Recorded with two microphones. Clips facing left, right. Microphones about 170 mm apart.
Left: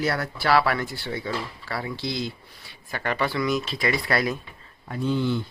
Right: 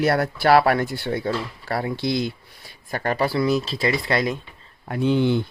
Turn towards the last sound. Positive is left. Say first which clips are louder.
# right 5 dB
turn(degrees=-65)  # may be behind; listen again after turning